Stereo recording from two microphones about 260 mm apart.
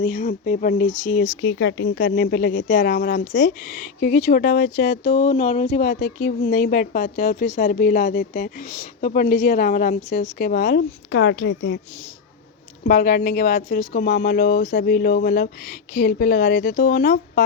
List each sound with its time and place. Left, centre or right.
0.0 s speech: left
1.4 s speech: left
12.9 s speech: left